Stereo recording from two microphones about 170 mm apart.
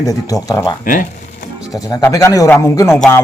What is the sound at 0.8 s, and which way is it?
Speech, 55° left (ahead or behind).